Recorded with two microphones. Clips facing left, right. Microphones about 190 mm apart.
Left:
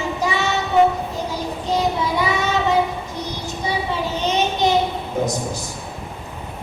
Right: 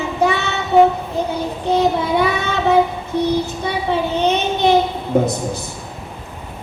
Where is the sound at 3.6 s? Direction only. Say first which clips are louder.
Even; 60° right (ahead or behind).